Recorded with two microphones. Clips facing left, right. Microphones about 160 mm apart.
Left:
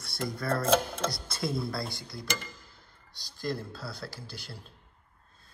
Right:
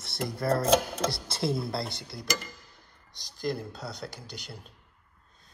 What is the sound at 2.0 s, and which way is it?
Speech, centre (ahead or behind).